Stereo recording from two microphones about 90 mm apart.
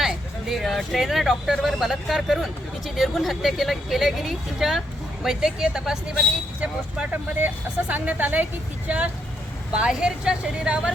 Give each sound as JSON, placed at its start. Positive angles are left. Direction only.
{"t": 0.0, "sound": "speech", "side_deg": 0}
{"t": 6.6, "sound": "speech", "side_deg": -15}